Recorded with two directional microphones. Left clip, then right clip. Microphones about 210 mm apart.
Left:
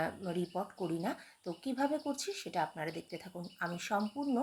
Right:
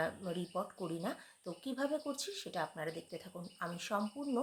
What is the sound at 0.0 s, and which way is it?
Speech, 10° left (ahead or behind).